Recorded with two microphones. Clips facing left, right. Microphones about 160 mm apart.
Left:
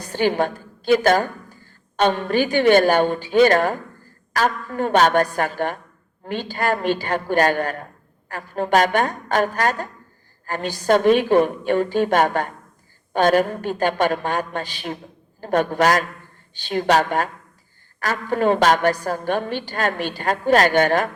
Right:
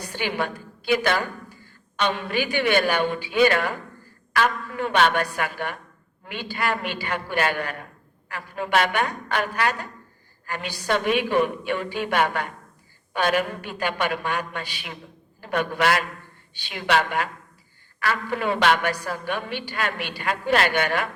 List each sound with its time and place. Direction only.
0.1 s a woman's voice: 40° left (ahead or behind)